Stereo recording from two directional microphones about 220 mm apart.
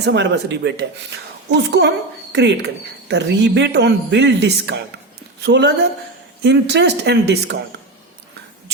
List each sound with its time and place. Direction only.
0.0 s speech: 50° right (ahead or behind)